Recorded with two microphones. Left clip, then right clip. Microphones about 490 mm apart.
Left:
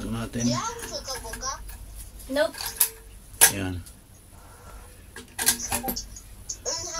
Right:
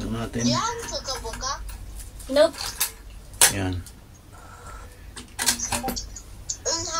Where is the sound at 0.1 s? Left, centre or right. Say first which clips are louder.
Right 3 dB; left.